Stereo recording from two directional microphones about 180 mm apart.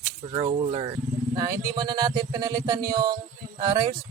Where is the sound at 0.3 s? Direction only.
30° right (ahead or behind).